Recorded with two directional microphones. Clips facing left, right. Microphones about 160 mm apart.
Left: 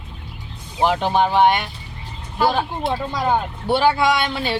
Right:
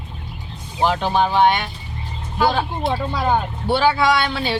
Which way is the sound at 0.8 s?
15° left (ahead or behind).